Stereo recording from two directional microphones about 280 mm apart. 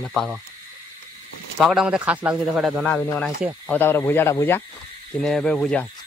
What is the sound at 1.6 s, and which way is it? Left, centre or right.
Speech, centre.